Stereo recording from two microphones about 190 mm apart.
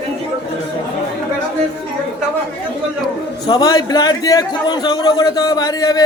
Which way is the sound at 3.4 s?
20° left (ahead or behind).